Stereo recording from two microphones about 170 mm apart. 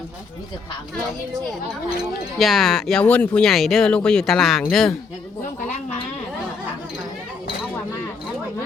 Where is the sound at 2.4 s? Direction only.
Centre (ahead or behind).